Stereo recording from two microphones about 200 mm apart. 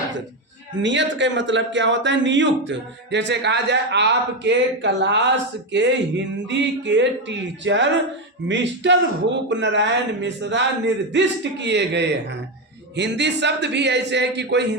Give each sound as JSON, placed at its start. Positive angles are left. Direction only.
{"t": 0.8, "sound": "speech", "side_deg": -65}